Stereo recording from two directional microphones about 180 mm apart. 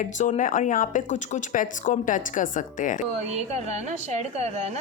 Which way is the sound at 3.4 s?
35° right (ahead or behind).